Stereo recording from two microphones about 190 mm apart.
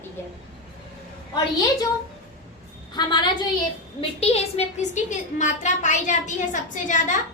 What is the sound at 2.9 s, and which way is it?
A woman's voice, 25° left (ahead or behind).